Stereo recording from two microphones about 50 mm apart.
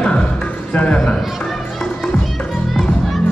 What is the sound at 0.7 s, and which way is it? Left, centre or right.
Speech, left.